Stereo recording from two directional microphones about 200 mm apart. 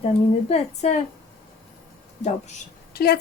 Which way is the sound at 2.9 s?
50° left (ahead or behind).